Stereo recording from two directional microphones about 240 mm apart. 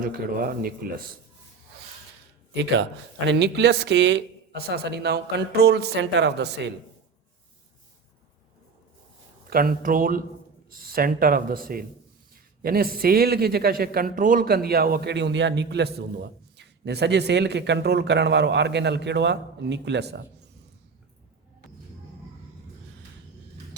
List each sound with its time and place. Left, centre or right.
0.0 s a man's voice: right
3.2 s a man's voice: right
9.5 s a man's voice: right